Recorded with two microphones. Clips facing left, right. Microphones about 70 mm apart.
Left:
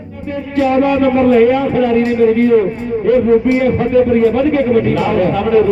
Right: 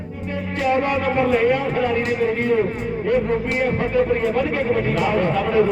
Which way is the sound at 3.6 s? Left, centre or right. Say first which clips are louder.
Left 7 dB; centre.